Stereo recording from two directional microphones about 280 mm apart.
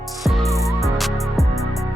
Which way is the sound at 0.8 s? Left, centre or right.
Centre.